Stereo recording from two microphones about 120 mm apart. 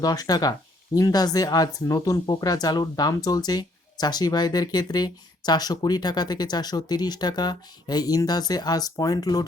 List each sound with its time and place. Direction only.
0.0 s speech: 35° left (ahead or behind)